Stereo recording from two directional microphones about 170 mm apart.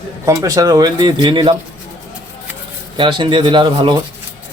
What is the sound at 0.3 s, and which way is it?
Speech, 20° right (ahead or behind).